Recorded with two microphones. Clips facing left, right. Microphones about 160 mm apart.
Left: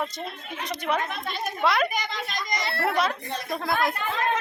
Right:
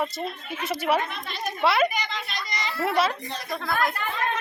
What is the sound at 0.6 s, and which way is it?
A woman's voice, 5° right (ahead or behind).